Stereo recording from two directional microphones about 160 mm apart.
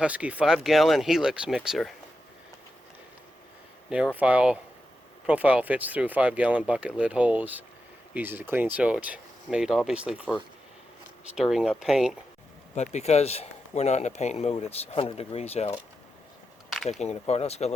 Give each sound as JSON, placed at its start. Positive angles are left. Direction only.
{"t": 0.0, "sound": "speech", "side_deg": -10}
{"t": 3.8, "sound": "speech", "side_deg": -5}
{"t": 11.3, "sound": "speech", "side_deg": -5}
{"t": 12.7, "sound": "a man's voice", "side_deg": 45}
{"t": 16.6, "sound": "a sound", "side_deg": 0}
{"t": 17.0, "sound": "a man's voice", "side_deg": 40}